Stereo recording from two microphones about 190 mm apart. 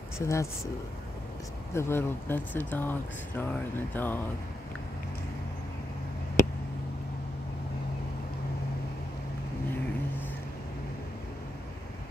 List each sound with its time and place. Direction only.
0.2 s speech: 15° left (ahead or behind)
1.7 s speech: 15° left (ahead or behind)